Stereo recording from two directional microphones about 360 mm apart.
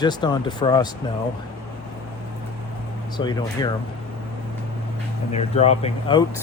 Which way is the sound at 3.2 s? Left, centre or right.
Centre.